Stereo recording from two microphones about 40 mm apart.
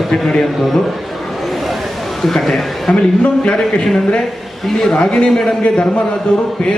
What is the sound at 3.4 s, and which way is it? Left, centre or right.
A man's voice, centre.